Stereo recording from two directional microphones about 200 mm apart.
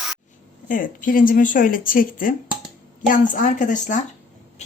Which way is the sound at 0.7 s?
40° left (ahead or behind).